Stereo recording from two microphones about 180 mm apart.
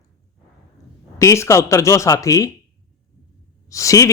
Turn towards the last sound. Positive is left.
turn(degrees=20)  # may be behind; listen again after turning